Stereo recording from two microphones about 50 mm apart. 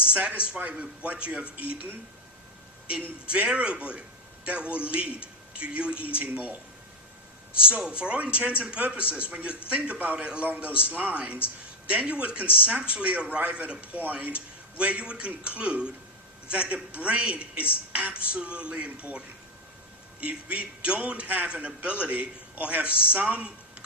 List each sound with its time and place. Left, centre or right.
0.1 s a man's voice: right
3.3 s a man's voice: right
6.2 s a man's voice: right
7.6 s a man's voice: centre
20.2 s a man's voice: right